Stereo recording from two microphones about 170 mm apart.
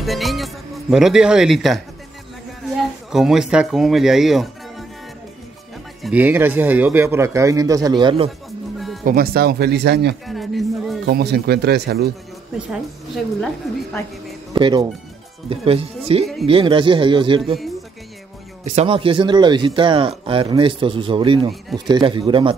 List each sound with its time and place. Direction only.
0.0 s speech: centre (ahead or behind)
6.0 s a man's voice: 10° right (ahead or behind); by 8.3 s 30° right (ahead or behind)
8.7 s music: centre (ahead or behind)
9.0 s speech: 60° right (ahead or behind); by 10.1 s 80° right
10.2 s a sound: centre (ahead or behind)
11.1 s speech: 65° right (ahead or behind)
12.5 s speech: centre (ahead or behind)
14.5 s speech: 25° right (ahead or behind)
18.8 s speech: 30° right (ahead or behind)